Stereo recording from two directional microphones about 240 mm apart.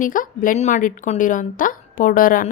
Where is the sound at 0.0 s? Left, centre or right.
Left.